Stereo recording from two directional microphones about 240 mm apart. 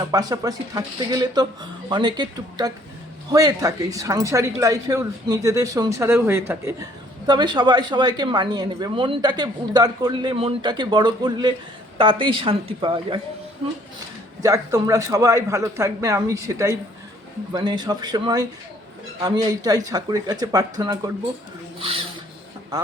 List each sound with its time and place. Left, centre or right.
0.1 s a woman's voice: centre
14.4 s a woman's voice: centre
21.8 s a sound: right